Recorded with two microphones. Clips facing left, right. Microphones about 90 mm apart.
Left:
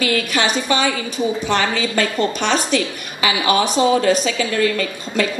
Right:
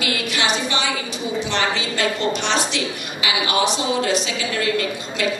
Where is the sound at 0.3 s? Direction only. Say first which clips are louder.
Left 3 dB; 45° left (ahead or behind).